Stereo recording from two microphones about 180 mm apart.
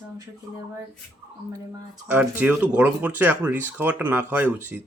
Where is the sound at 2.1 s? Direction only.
5° right (ahead or behind).